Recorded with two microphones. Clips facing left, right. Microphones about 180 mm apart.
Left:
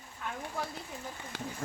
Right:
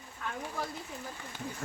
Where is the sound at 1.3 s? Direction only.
90° left.